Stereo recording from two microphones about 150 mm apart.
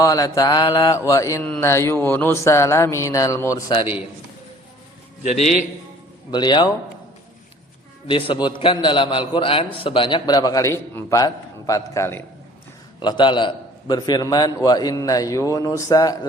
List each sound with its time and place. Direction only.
0.0 s mantra: 25° left (ahead or behind)
5.2 s a man's voice: 50° left (ahead or behind)
6.3 s mantra: 30° left (ahead or behind)
8.0 s a man's voice: 30° left (ahead or behind)
13.0 s mantra: 30° left (ahead or behind)